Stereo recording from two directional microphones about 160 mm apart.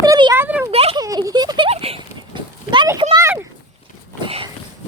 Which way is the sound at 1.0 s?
20° right (ahead or behind).